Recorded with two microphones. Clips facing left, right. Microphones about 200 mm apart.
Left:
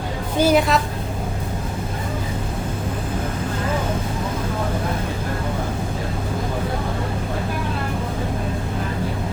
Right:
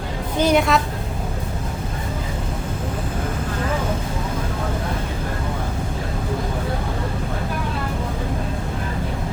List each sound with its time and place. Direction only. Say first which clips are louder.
0.3 s a woman's voice: left 1 dB; 5° left (ahead or behind)